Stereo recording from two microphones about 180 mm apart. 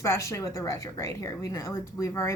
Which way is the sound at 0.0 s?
15° left (ahead or behind).